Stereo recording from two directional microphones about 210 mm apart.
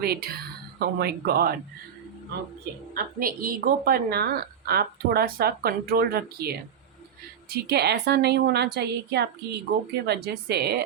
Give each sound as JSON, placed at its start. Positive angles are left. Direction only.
{"t": 0.0, "sound": "speech", "side_deg": -45}
{"t": 2.9, "sound": "a woman's voice", "side_deg": -45}